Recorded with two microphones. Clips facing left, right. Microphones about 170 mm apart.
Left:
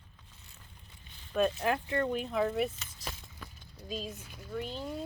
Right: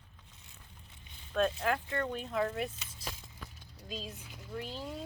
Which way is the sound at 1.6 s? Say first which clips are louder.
Left 3 dB; 20° left (ahead or behind).